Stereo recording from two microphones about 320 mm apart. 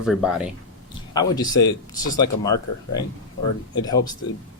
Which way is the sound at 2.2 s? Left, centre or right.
Centre.